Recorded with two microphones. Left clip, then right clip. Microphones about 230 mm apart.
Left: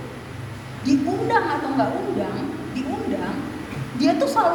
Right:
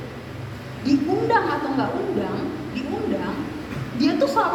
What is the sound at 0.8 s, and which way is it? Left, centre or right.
A woman's voice, left.